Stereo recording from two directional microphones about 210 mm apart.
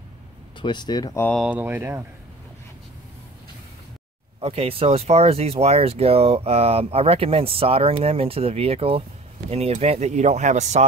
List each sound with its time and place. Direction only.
0.6 s speech: 20° left (ahead or behind)
1.4 s speech: 10° right (ahead or behind)
4.4 s speech: 25° right (ahead or behind)